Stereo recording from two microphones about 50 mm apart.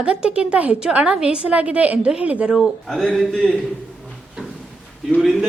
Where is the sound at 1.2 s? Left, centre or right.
Centre.